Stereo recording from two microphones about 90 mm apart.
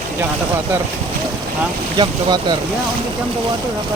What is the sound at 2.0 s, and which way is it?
Speech, 55° right (ahead or behind).